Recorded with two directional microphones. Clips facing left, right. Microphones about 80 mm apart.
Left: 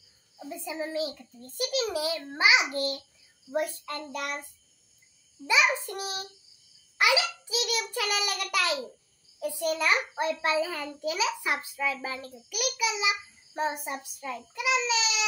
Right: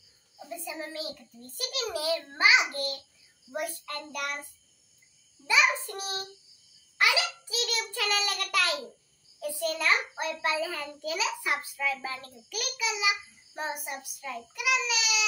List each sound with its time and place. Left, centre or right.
0.5 s a child's voice: left
5.5 s a child's voice: centre